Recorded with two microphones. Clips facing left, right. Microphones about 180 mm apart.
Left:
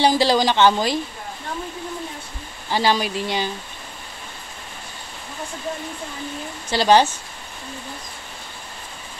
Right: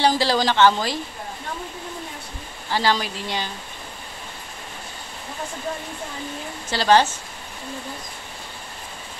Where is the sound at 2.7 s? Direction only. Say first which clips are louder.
Left 2 dB; 15° left (ahead or behind).